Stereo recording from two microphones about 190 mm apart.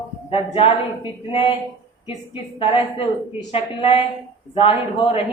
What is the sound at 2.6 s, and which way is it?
Speech, 30° left (ahead or behind).